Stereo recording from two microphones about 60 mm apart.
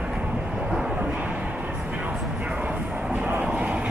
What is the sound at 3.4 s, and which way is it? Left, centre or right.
Vehicle, centre.